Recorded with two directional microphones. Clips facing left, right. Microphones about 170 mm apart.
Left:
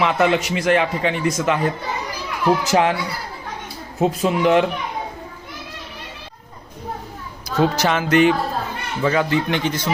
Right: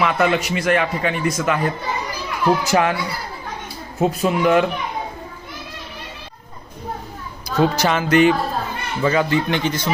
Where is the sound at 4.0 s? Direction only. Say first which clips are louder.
Even; 20° left (ahead or behind).